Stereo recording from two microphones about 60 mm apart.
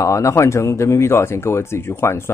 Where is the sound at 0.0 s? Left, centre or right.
Left.